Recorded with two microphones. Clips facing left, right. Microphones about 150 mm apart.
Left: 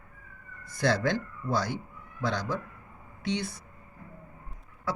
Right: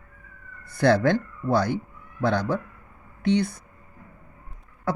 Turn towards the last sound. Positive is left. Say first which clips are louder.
# right 9 dB
turn(degrees=-55)  # may be behind; listen again after turning